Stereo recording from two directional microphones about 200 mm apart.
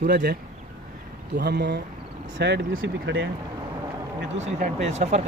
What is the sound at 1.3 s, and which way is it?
Speech, 55° right (ahead or behind).